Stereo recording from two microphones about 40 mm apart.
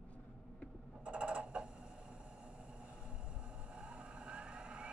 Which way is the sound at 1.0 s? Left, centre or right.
Right.